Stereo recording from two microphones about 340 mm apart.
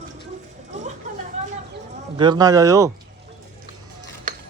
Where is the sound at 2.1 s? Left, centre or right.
Centre.